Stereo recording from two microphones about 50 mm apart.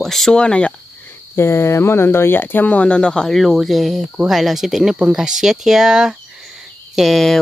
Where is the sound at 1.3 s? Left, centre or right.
Left.